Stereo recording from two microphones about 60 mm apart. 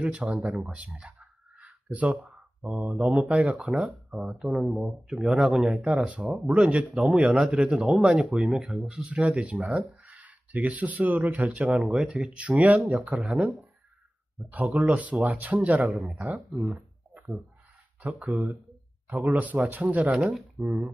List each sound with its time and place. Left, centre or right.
0.0 s speech: right
1.0 s a sound: right
2.8 s speech: centre
4.5 s speech: centre
8.8 s speech: centre
11.7 s speech: centre; by 13.3 s right
14.5 s speech: right
18.0 s speech: right
20.6 s speech: right